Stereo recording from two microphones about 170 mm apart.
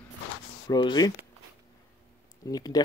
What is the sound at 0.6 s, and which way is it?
Speech, 25° left (ahead or behind).